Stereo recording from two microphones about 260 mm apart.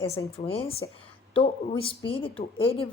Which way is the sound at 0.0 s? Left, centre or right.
Left.